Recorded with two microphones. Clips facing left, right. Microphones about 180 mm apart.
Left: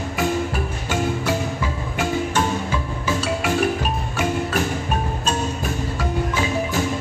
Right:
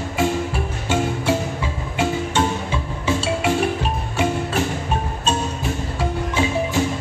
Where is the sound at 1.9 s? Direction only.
25° right (ahead or behind).